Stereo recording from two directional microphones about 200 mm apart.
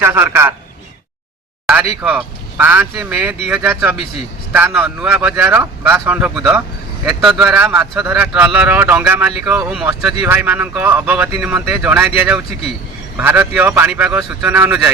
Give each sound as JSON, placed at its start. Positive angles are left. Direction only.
{"t": 0.0, "sound": "speech", "side_deg": -10}
{"t": 1.6, "sound": "speech", "side_deg": -5}
{"t": 3.9, "sound": "speech", "side_deg": 30}
{"t": 4.5, "sound": "speech", "side_deg": -10}